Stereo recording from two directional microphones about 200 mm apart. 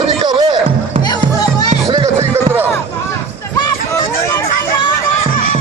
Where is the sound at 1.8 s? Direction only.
20° right (ahead or behind).